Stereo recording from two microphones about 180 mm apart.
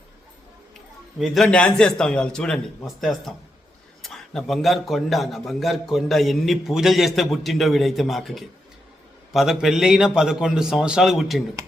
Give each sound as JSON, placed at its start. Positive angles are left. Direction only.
{"t": 1.2, "sound": "a man's voice", "side_deg": 0}